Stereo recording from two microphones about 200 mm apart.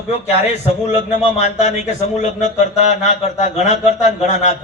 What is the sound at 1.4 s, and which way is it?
Speech, 35° left (ahead or behind).